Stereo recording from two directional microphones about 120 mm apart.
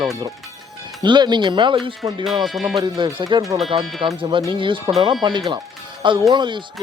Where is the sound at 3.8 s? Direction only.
Centre (ahead or behind).